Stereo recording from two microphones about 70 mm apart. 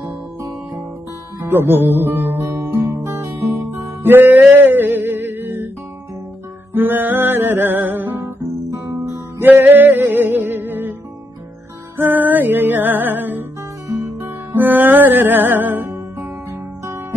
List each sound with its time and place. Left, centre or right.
1.4 s music: right
6.7 s music: right
8.9 s music: right
9.4 s music: right
12.0 s music: right